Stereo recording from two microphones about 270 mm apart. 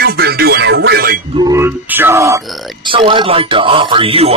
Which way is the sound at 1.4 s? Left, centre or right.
Centre.